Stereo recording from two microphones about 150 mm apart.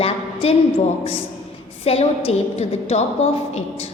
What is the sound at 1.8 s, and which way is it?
A woman's voice, 40° left (ahead or behind).